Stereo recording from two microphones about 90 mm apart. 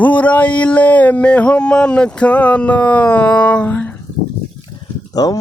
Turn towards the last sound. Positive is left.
turn(degrees=45)  # may be behind; listen again after turning